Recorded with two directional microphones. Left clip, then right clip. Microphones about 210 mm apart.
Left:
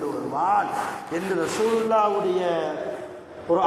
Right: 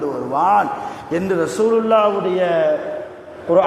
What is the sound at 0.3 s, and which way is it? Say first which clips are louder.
Speech: right 7 dB; 50° right (ahead or behind).